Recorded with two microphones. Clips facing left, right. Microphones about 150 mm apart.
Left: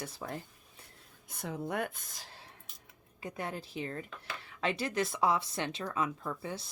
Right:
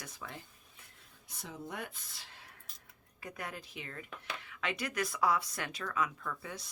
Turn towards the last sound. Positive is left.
turn(degrees=30)  # may be behind; listen again after turning